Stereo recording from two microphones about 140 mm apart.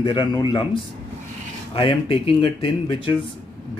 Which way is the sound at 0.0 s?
35° left (ahead or behind).